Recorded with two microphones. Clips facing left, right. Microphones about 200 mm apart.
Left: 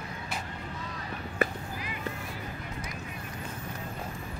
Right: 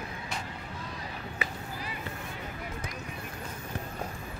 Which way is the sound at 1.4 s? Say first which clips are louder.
Left 10 dB; 50° left (ahead or behind).